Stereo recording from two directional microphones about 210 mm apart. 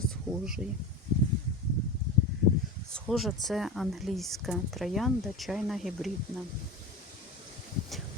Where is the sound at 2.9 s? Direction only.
Centre (ahead or behind).